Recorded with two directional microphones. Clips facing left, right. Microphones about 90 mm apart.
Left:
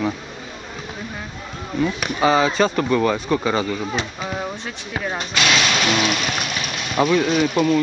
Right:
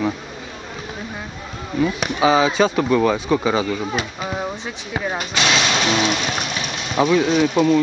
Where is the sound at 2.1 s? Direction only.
Centre (ahead or behind).